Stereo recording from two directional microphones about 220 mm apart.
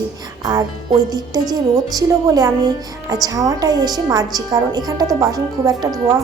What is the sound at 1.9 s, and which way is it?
A woman's voice, 15° right (ahead or behind).